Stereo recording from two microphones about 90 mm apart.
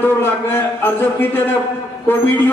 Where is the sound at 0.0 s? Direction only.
25° left (ahead or behind).